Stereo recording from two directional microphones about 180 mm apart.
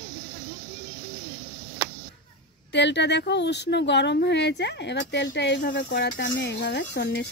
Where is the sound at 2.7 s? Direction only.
75° left (ahead or behind).